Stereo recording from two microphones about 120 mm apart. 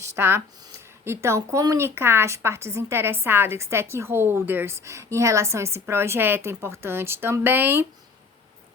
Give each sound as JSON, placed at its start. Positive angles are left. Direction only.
{"t": 0.0, "sound": "a woman's voice", "side_deg": -20}